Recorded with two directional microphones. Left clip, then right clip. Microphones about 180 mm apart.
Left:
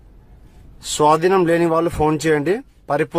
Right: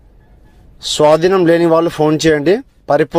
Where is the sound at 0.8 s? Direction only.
20° right (ahead or behind).